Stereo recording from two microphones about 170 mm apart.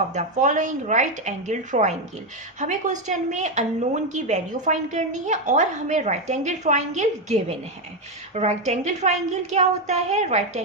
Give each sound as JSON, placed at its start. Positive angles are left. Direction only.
{"t": 0.1, "sound": "a woman's voice", "side_deg": -45}